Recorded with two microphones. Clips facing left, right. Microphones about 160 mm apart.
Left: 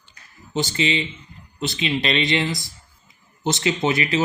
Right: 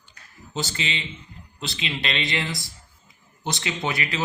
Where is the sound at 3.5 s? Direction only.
25° left (ahead or behind).